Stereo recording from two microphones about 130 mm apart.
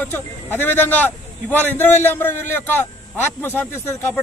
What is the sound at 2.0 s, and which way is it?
A man's voice, 15° left (ahead or behind).